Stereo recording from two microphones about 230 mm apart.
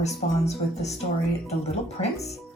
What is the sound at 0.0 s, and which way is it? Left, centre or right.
Speech, left.